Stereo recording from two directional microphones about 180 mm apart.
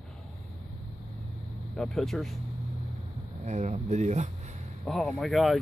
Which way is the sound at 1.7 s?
Centre (ahead or behind).